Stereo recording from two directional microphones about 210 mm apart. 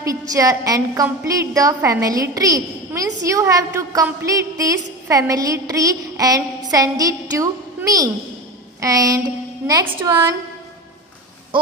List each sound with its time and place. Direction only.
0.0 s a woman's voice: 15° right (ahead or behind)